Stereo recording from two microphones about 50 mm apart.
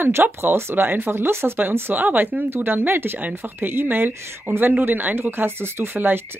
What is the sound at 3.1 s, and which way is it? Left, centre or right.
Speech, right.